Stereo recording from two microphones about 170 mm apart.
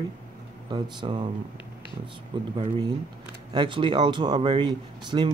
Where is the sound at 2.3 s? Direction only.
25° right (ahead or behind).